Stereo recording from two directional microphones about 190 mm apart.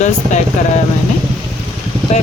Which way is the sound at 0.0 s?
40° left (ahead or behind).